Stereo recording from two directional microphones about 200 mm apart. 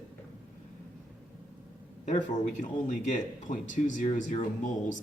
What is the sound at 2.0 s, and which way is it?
Speech, 35° left (ahead or behind).